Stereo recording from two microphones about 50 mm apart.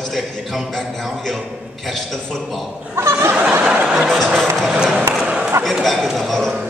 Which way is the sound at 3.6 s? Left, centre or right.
Centre.